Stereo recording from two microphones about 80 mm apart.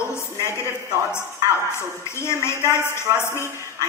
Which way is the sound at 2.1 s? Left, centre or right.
Left.